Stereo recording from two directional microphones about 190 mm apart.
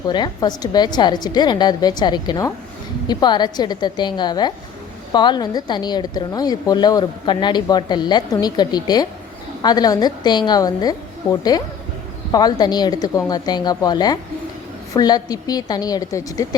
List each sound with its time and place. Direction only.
0.1 s a woman's voice: 20° left (ahead or behind)